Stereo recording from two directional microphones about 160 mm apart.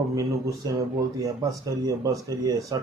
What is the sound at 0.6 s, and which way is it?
Speech, 25° right (ahead or behind).